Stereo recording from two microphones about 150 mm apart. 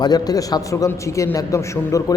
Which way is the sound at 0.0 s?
25° left (ahead or behind).